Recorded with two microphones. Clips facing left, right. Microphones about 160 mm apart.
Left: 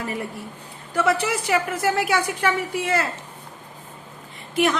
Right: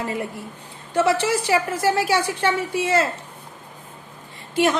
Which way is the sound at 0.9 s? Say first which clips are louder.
Right 2 dB; 25° right (ahead or behind).